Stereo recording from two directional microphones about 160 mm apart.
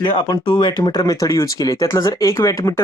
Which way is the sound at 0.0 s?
30° left (ahead or behind).